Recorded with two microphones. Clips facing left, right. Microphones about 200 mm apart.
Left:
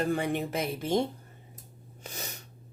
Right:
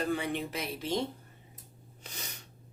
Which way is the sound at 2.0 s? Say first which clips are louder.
Left 5 dB; 50° left (ahead or behind).